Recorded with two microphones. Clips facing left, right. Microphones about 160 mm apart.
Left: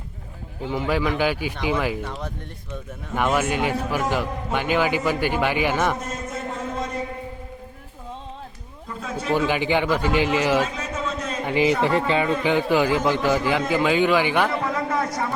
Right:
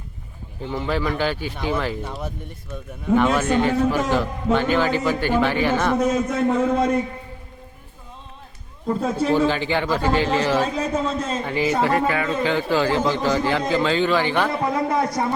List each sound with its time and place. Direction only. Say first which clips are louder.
0.7 s a man's voice: left 1 dB; 10° left (ahead or behind)
2.0 s speech: right 1 dB; 10° right (ahead or behind)
3.2 s a man's voice: right 2 dB; 10° left (ahead or behind)
6.0 s a man's voice: right 11 dB; 75° right (ahead or behind)
8.9 s a man's voice: right 9 dB; 35° right (ahead or behind)
9.5 s a man's voice: left 1 dB; 15° left (ahead or behind)
10.8 s a sound: right 5 dB; 30° right (ahead or behind)
11.4 s a man's voice: left 2 dB; 15° left (ahead or behind)
15.0 s a man's voice: right 3 dB; 35° right (ahead or behind)